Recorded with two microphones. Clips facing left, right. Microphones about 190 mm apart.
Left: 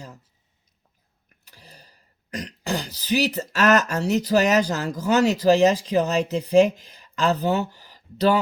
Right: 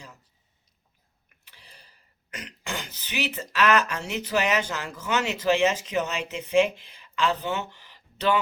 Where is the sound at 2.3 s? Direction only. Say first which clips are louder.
Left 8 dB; 35° left (ahead or behind).